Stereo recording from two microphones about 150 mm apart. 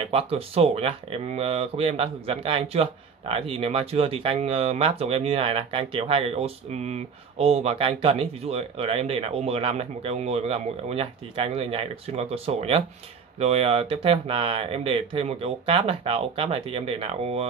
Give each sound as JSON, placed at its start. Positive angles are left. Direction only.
{"t": 0.0, "sound": "speech", "side_deg": -40}